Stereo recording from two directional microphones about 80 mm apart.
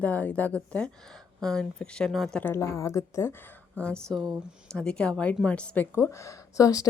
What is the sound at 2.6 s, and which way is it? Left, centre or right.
Speech, left.